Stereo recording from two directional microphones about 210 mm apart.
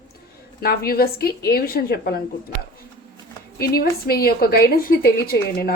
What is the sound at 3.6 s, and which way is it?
A woman's voice, 45° left (ahead or behind).